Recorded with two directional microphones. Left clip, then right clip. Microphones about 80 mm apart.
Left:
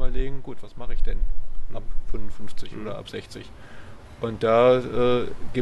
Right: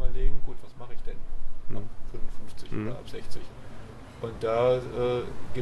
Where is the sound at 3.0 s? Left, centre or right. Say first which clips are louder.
Left 6 dB; left.